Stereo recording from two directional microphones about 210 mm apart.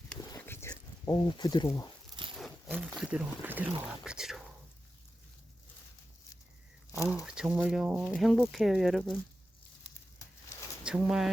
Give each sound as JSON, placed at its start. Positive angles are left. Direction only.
{"t": 0.3, "sound": "a sound", "side_deg": 10}
{"t": 2.4, "sound": "speech", "side_deg": 0}
{"t": 6.9, "sound": "speech", "side_deg": -10}
{"t": 10.8, "sound": "speech", "side_deg": -5}